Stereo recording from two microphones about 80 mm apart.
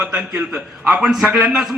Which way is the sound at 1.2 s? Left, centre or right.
Right.